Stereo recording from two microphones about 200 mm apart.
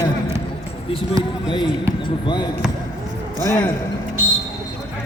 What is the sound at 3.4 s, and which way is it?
Speech, 10° left (ahead or behind).